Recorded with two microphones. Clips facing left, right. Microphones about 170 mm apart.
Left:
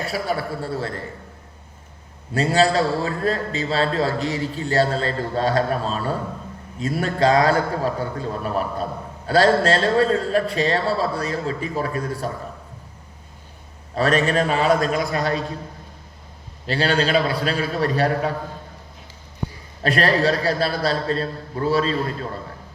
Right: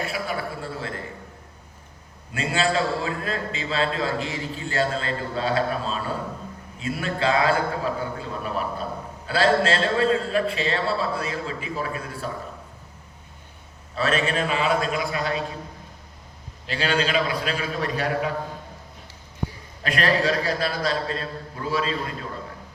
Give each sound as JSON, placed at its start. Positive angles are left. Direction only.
{"t": 0.0, "sound": "a sound", "side_deg": 40}
{"t": 2.3, "sound": "a man's voice", "side_deg": 40}
{"t": 13.9, "sound": "a man's voice", "side_deg": 40}
{"t": 16.6, "sound": "a man's voice", "side_deg": 35}
{"t": 19.8, "sound": "a man's voice", "side_deg": 35}